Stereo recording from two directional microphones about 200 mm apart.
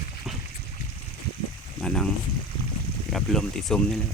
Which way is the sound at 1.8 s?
5° left (ahead or behind).